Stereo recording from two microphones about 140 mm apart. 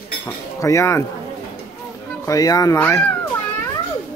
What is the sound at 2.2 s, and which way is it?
Speech, 25° left (ahead or behind).